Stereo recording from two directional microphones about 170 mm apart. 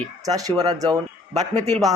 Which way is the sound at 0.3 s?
20° right (ahead or behind).